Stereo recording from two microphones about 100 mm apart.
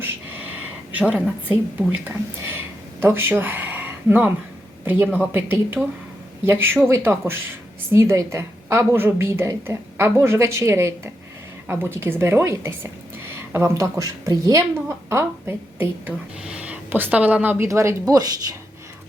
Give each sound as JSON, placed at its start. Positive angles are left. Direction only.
{"t": 0.0, "sound": "a sound", "side_deg": -15}
{"t": 3.0, "sound": "a woman's voice", "side_deg": -20}
{"t": 16.4, "sound": "speech", "side_deg": -10}
{"t": 17.7, "sound": "speech", "side_deg": -30}